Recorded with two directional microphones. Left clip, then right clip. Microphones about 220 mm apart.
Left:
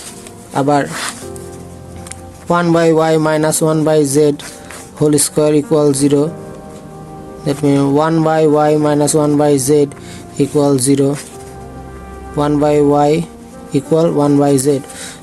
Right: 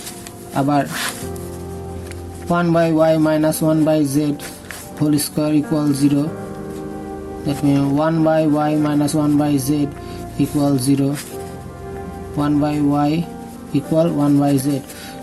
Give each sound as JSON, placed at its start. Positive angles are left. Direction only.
{"t": 0.5, "sound": "a man's voice", "side_deg": 45}
{"t": 2.5, "sound": "a man's voice", "side_deg": 45}
{"t": 7.4, "sound": "a man's voice", "side_deg": 45}
{"t": 12.4, "sound": "a man's voice", "side_deg": 45}